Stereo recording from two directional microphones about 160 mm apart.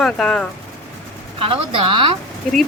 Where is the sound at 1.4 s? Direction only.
35° right (ahead or behind).